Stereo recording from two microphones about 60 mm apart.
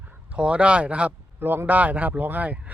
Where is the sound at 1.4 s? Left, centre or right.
Right.